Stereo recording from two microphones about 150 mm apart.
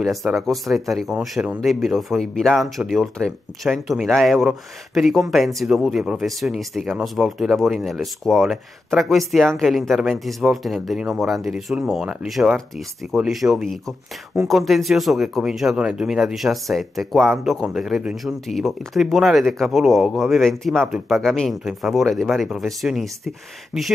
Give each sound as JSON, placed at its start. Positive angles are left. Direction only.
{"t": 0.0, "sound": "speech", "side_deg": 0}